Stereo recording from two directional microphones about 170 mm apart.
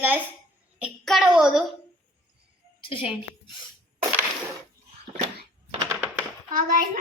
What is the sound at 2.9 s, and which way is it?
Speech, 30° left (ahead or behind).